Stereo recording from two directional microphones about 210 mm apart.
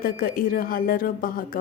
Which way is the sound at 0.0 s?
45° left (ahead or behind).